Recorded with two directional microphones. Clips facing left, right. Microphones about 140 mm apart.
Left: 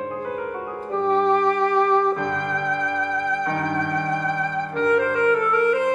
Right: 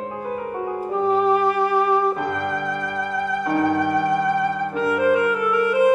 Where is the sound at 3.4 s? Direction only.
5° right (ahead or behind).